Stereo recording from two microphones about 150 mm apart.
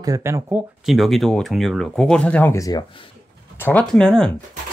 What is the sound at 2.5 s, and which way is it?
Speech, 25° left (ahead or behind).